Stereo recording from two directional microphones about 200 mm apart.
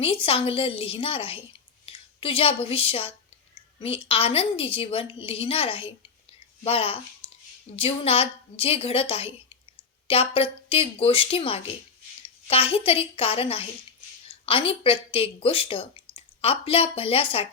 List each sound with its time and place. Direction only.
0.0 s speech: 30° left (ahead or behind)